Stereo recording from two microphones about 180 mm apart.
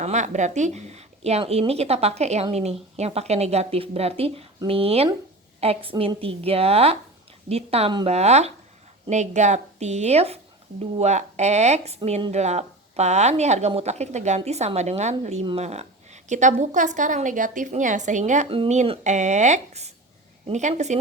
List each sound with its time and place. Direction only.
0.0 s a woman's voice: 40° right (ahead or behind)